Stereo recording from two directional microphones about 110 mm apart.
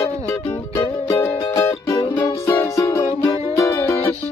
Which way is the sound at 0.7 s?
30° left (ahead or behind).